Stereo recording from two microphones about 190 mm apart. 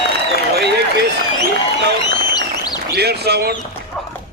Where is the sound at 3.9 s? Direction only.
5° left (ahead or behind).